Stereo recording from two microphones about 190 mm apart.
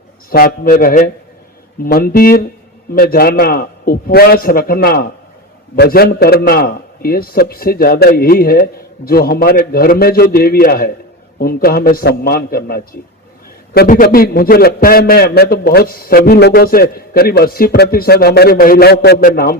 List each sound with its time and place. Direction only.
0.3 s a man's voice: 50° left (ahead or behind)